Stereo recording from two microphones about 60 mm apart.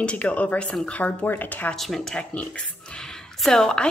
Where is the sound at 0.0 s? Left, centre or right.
Left.